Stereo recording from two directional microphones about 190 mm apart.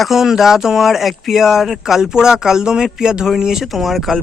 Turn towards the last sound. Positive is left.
turn(degrees=0)  # may be behind; listen again after turning